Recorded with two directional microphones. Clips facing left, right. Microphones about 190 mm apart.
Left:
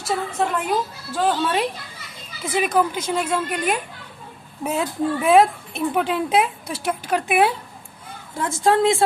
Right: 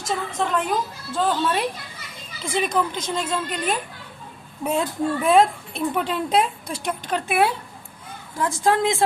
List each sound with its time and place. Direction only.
0.3 s speech: 10° left (ahead or behind)
8.4 s a woman's voice: 25° left (ahead or behind)